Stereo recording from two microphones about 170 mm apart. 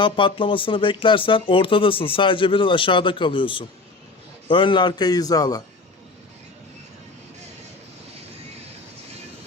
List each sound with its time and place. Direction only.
0.0 s a man's voice: 30° left (ahead or behind)